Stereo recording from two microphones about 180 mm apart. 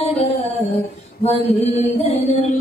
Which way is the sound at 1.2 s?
35° left (ahead or behind).